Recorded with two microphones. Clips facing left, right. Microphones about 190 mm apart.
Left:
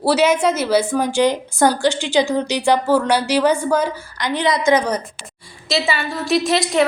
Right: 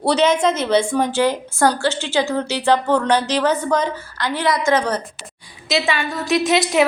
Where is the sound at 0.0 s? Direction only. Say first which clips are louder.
Left 1 dB; 5° left (ahead or behind).